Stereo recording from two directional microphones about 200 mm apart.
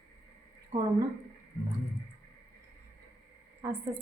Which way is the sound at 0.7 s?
30° right (ahead or behind).